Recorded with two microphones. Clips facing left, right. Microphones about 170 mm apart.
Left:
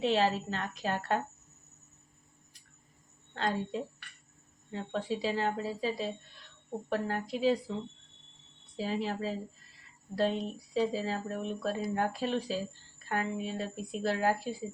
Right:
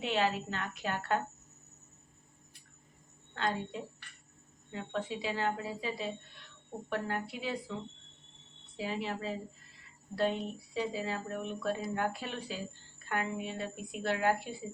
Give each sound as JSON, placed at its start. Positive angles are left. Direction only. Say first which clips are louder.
{"t": 0.0, "sound": "speech", "louder": "left 4 dB", "side_deg": 35}
{"t": 3.3, "sound": "speech", "louder": "left 2 dB", "side_deg": 35}
{"t": 8.8, "sound": "speech", "louder": "left 3 dB", "side_deg": 40}